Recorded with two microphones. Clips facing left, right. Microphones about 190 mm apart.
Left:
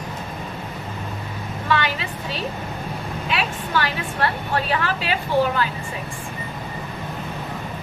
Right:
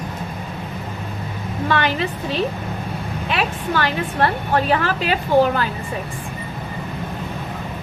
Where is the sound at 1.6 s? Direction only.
45° right (ahead or behind).